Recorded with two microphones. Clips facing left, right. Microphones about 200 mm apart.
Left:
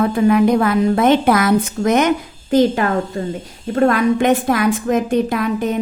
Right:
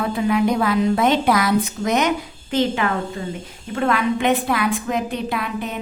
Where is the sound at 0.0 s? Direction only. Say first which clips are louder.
Left 6 dB; 50° left (ahead or behind).